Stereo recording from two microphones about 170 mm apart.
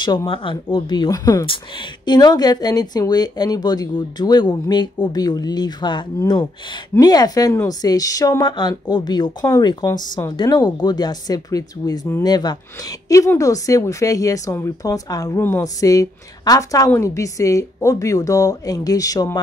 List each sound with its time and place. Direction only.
0.0 s speech: 25° left (ahead or behind)